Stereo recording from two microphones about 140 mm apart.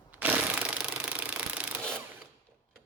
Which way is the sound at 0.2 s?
10° right (ahead or behind).